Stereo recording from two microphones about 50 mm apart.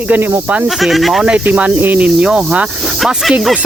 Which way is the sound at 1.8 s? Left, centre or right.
Right.